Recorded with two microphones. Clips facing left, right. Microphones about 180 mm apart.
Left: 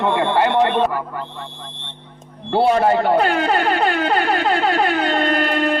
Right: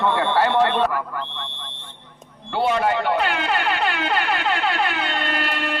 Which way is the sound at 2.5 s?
40° left (ahead or behind).